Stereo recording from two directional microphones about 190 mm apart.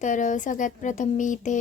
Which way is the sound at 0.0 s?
40° left (ahead or behind).